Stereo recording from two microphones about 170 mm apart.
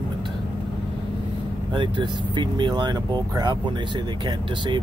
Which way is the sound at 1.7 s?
25° right (ahead or behind).